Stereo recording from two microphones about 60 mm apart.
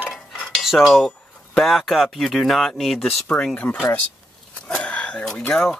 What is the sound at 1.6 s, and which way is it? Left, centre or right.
Speech, centre.